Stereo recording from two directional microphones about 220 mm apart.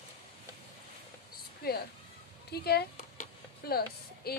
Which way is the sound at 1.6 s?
45° left (ahead or behind).